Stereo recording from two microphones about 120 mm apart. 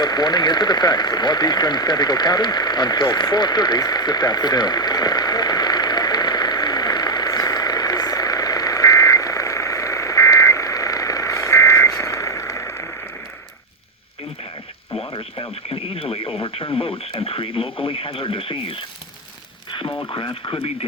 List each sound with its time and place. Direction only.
0.0 s a sound: 35° left (ahead or behind)
15.1 s radio: 45° left (ahead or behind)
19.9 s radio: 35° left (ahead or behind)